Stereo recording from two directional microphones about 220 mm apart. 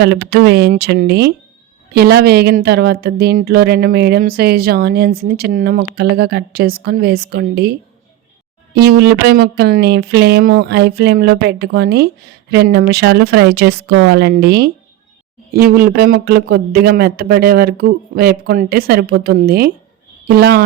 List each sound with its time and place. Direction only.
0.0 s speech: 50° right (ahead or behind)